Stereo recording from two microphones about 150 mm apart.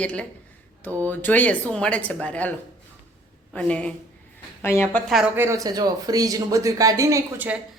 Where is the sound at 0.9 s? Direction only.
20° right (ahead or behind).